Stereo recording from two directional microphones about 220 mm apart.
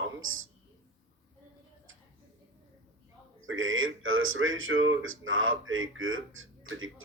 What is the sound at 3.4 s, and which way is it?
Speech, 65° right (ahead or behind).